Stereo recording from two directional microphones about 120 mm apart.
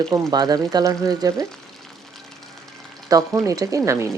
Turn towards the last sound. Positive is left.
turn(degrees=-25)  # may be behind; listen again after turning